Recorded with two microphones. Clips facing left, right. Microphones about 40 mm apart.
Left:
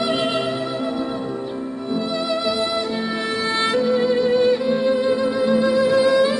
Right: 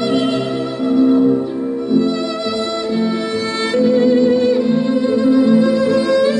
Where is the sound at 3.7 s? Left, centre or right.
Centre.